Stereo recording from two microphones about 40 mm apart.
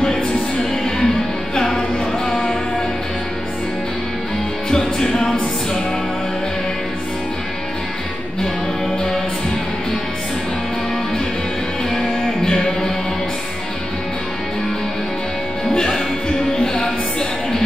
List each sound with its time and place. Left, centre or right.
0.8 s music: centre
4.6 s music: centre
12.4 s music: centre
15.7 s music: centre